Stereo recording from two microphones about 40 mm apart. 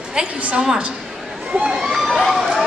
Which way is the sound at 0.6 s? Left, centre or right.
Centre.